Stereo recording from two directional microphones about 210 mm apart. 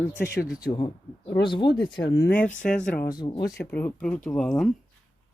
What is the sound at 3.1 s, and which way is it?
Speech, 20° left (ahead or behind).